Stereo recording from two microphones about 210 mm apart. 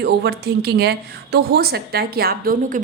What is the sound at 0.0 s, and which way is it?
Speech, 50° right (ahead or behind).